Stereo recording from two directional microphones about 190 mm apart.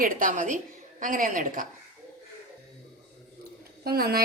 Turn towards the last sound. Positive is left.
turn(degrees=-55)  # may be behind; listen again after turning